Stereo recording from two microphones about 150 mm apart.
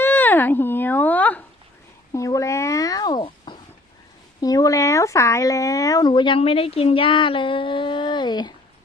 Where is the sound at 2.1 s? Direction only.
20° left (ahead or behind).